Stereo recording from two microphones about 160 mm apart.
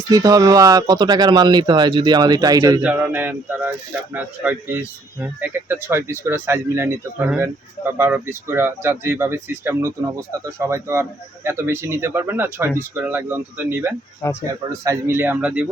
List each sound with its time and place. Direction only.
0.1 s speech: 20° right (ahead or behind)
2.8 s speech: 10° right (ahead or behind)
14.2 s speech: 20° left (ahead or behind)
14.7 s speech: 20° right (ahead or behind)